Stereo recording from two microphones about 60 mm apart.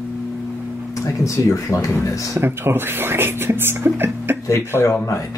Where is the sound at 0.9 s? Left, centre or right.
Left.